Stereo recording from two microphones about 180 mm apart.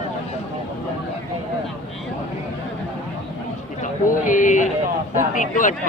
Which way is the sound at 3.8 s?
45° left (ahead or behind).